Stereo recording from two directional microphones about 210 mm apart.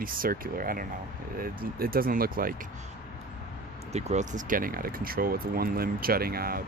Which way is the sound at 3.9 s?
30° right (ahead or behind).